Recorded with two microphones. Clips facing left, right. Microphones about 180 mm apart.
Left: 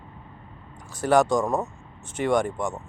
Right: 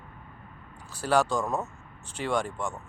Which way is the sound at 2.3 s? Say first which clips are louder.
Left 6 dB; 15° left (ahead or behind).